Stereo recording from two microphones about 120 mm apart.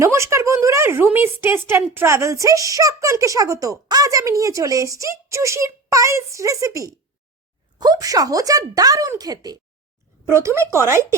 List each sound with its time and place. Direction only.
0.0 s a woman's voice: 25° right (ahead or behind)